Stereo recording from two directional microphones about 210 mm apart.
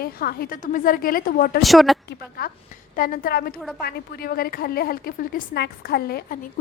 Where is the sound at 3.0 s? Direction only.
45° left (ahead or behind).